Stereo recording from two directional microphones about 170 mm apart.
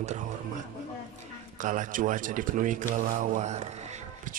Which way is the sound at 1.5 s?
50° right (ahead or behind).